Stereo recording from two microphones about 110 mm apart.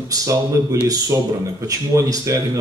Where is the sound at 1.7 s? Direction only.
30° right (ahead or behind).